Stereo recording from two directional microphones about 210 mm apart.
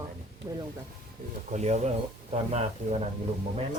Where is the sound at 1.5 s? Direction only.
35° right (ahead or behind).